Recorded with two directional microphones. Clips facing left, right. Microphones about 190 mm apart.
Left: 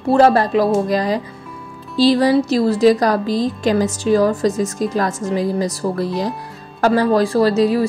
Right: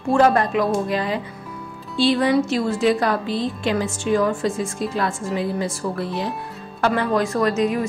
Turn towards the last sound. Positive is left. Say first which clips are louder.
# left 5 dB
turn(degrees=35)  # may be behind; listen again after turning